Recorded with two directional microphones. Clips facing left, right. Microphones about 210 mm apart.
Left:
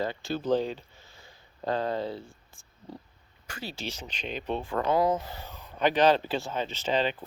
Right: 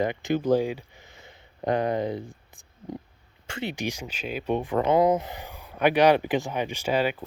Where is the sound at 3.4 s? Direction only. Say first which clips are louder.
Right 7 dB; 25° right (ahead or behind).